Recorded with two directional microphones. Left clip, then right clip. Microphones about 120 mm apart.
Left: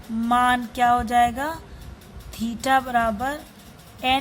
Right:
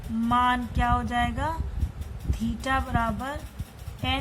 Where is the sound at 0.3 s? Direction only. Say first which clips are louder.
Left 4 dB; 55° left (ahead or behind).